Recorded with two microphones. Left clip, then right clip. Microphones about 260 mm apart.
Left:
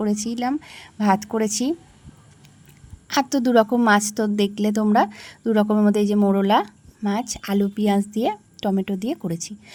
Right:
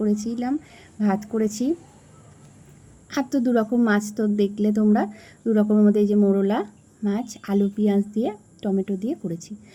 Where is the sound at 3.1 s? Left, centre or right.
Left.